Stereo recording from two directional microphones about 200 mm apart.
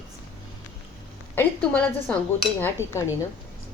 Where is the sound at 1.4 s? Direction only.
5° left (ahead or behind).